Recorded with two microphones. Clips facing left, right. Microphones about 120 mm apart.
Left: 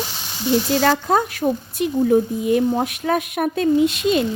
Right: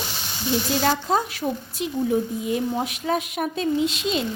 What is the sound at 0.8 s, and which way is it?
A woman's voice, 60° left (ahead or behind).